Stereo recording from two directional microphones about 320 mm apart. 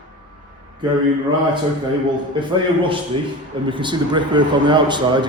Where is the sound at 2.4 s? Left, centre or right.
Centre.